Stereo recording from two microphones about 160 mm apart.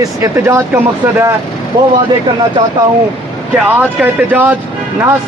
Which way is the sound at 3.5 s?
5° right (ahead or behind).